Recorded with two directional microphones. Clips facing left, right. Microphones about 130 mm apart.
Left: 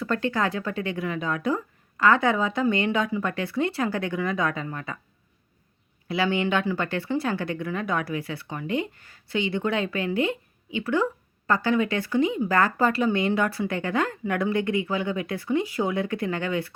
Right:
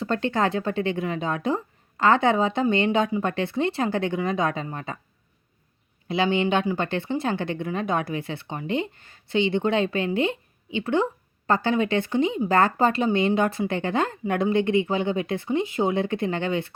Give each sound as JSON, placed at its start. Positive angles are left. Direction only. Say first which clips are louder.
{"t": 0.0, "sound": "speech", "louder": "right 2 dB", "side_deg": -25}
{"t": 6.1, "sound": "speech", "louder": "right 2 dB", "side_deg": -20}